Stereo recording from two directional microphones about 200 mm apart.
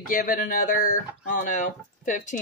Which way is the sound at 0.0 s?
45° left (ahead or behind).